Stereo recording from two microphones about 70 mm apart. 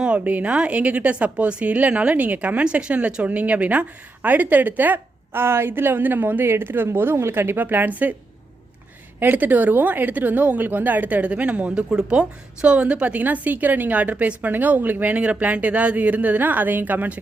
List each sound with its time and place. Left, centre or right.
0.0 s a woman's voice: right
9.2 s a woman's voice: right
11.7 s a woman's voice: centre; by 17.2 s right